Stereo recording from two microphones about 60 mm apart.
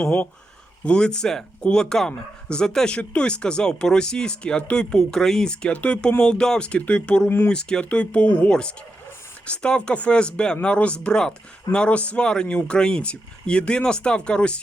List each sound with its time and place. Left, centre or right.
0.9 s speech: centre